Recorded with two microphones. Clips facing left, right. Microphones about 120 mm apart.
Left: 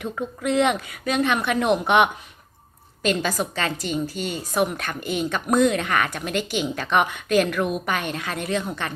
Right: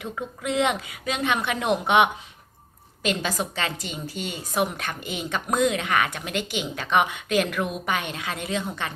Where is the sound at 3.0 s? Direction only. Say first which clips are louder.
Left 3 dB; 20° right (ahead or behind).